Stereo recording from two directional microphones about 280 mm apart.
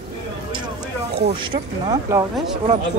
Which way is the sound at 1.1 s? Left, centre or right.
Centre.